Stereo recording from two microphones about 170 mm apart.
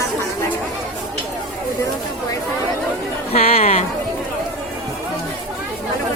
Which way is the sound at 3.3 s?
35° left (ahead or behind).